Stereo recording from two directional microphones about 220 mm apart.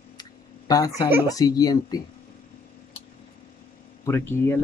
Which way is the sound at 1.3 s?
15° left (ahead or behind).